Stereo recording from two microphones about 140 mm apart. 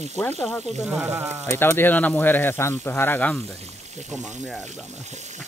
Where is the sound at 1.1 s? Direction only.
15° right (ahead or behind).